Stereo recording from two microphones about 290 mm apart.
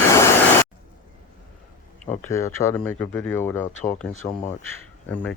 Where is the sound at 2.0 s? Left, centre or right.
Centre.